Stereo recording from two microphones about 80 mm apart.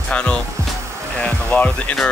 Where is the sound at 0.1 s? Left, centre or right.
Centre.